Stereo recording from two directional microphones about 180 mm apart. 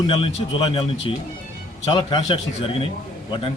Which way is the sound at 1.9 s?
25° left (ahead or behind).